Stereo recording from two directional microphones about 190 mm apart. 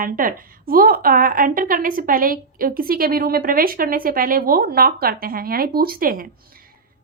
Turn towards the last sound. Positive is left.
turn(degrees=-50)  # may be behind; listen again after turning